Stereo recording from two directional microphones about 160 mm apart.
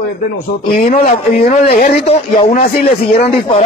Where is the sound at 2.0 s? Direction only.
35° left (ahead or behind).